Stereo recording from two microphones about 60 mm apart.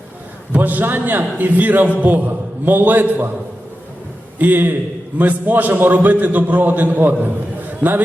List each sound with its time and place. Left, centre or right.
0.5 s a man's voice: right
4.4 s a man's voice: right